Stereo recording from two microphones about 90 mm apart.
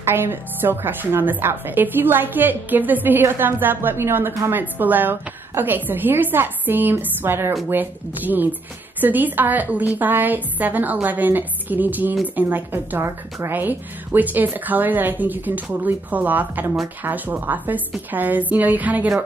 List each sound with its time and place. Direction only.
0.0 s a woman's voice: 25° right (ahead or behind)